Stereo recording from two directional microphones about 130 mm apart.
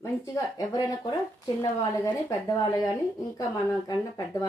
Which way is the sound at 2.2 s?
30° left (ahead or behind).